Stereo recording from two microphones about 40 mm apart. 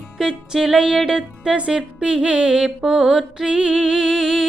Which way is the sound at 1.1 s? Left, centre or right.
Centre.